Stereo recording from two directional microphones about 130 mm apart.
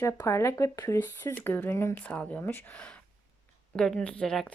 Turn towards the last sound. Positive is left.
turn(degrees=5)  # may be behind; listen again after turning